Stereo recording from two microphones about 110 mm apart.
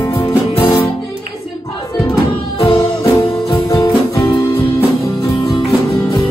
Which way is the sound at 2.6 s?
40° left (ahead or behind).